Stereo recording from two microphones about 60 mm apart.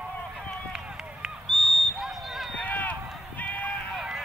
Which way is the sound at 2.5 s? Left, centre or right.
Left.